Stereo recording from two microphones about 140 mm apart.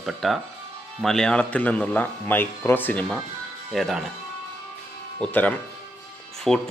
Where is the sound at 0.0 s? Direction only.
Centre (ahead or behind).